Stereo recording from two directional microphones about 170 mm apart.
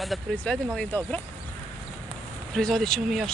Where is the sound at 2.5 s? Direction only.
Centre (ahead or behind).